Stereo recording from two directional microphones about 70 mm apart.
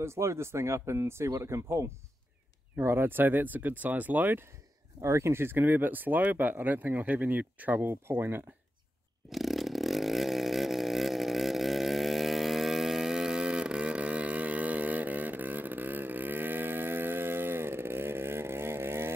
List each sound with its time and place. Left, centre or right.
0.0 s speech: right
5.0 s speech: right
9.3 s vehicle: centre; by 19.1 s right